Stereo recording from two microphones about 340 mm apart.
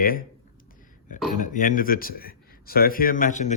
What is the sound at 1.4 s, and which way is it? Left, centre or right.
Speech, left.